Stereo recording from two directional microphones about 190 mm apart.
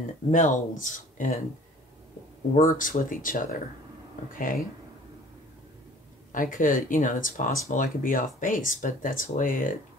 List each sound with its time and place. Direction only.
0.3 s speech: 40° left (ahead or behind)
2.5 s speech: 45° left (ahead or behind)
6.3 s speech: 45° left (ahead or behind)